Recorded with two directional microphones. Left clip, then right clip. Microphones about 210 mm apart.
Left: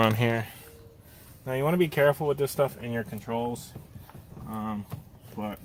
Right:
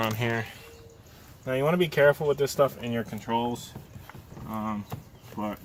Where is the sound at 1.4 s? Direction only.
35° left (ahead or behind).